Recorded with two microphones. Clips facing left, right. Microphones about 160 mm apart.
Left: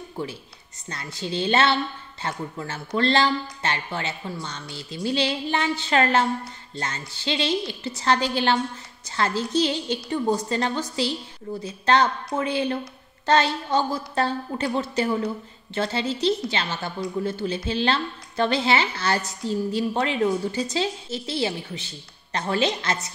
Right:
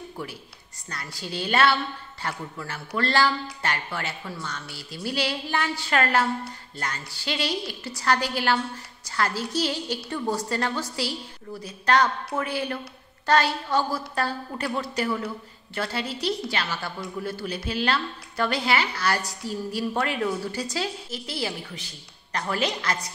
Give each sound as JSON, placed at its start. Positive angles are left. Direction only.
{"t": 0.2, "sound": "speech", "side_deg": 25}